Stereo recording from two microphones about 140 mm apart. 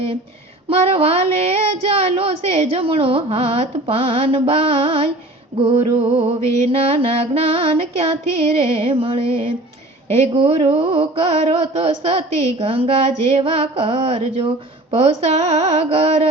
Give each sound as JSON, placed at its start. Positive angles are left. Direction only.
{"t": 0.7, "sound": "child singing", "side_deg": -45}
{"t": 8.5, "sound": "music", "side_deg": -40}
{"t": 10.2, "sound": "child singing", "side_deg": -45}